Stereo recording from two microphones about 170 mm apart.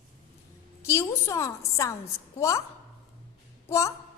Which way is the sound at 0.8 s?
15° left (ahead or behind).